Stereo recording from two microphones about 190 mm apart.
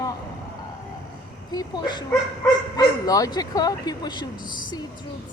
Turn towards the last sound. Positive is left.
turn(degrees=25)  # may be behind; listen again after turning